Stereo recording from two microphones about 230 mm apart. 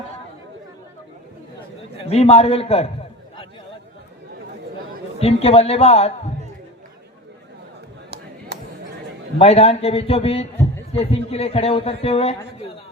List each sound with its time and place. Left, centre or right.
2.0 s a man's voice: left
5.2 s a man's voice: left
8.5 s a sound: right
9.4 s a man's voice: left